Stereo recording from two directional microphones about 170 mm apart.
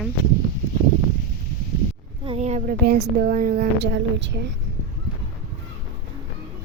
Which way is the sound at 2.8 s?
65° right (ahead or behind).